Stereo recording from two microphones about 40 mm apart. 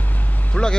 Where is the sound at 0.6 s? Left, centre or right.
Left.